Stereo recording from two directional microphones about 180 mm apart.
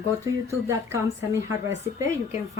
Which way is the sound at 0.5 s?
15° right (ahead or behind).